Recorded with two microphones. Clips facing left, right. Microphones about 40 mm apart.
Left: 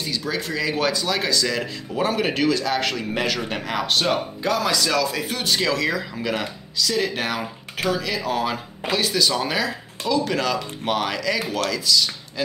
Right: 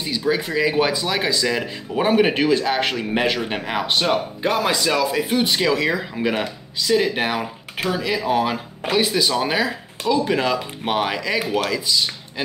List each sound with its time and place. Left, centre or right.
0.0 s speech: centre